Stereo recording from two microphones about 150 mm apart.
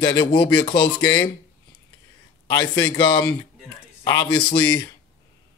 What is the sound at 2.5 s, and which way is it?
Speech, 30° left (ahead or behind).